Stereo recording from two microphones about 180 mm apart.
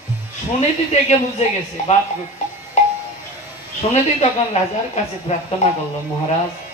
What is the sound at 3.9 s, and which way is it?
Music, 35° left (ahead or behind).